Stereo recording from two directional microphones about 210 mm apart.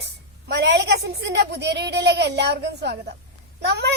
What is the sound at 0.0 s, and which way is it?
A woman's voice, 55° right (ahead or behind).